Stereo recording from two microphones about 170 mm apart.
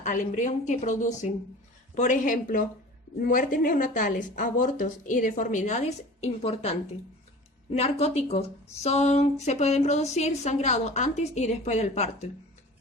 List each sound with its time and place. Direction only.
0.0 s speech: 45° left (ahead or behind)